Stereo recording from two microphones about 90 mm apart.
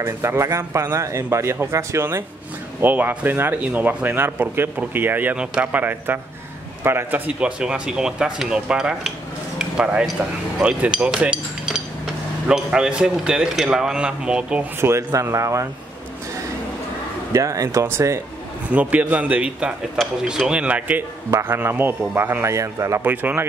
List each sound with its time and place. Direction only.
0.0 s speech: 30° right (ahead or behind); by 14.6 s 10° right (ahead or behind)
14.8 s speech: 30° right (ahead or behind)
17.3 s speech: 35° right (ahead or behind)
18.7 s speech: 15° right (ahead or behind)
21.3 s speech: 30° right (ahead or behind)
23.0 s speech: 20° right (ahead or behind)